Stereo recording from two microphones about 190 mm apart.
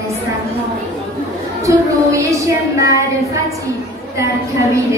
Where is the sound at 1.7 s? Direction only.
15° right (ahead or behind).